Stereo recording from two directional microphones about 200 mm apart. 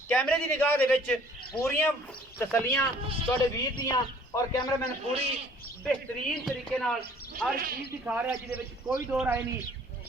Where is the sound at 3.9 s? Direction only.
15° left (ahead or behind).